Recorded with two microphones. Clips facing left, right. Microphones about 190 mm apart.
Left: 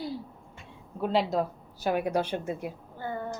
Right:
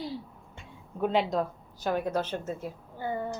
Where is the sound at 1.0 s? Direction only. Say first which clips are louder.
Even; centre (ahead or behind).